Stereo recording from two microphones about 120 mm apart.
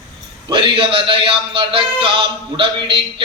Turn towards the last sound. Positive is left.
turn(degrees=-45)  # may be behind; listen again after turning